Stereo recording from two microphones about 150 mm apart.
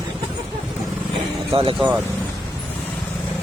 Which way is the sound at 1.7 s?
5° right (ahead or behind).